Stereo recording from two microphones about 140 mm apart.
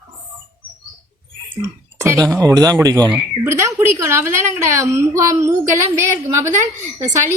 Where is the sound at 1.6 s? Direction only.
20° right (ahead or behind).